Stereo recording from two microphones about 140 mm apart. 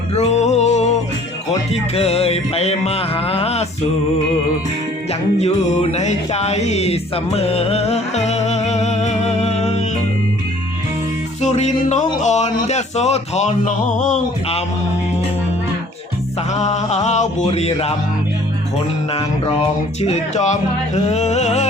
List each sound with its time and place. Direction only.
0.2 s music: 55° left (ahead or behind)
5.4 s music: 50° left (ahead or behind)
11.4 s music: 55° left (ahead or behind)
16.6 s music: 55° left (ahead or behind)
17.5 s speech: 45° left (ahead or behind)
20.0 s speech: 55° left (ahead or behind)